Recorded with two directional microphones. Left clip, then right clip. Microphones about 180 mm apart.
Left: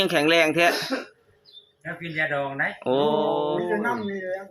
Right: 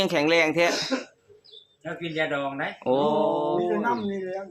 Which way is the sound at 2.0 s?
15° right (ahead or behind).